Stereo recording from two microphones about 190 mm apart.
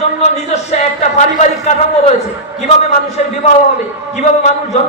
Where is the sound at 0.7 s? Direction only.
35° left (ahead or behind).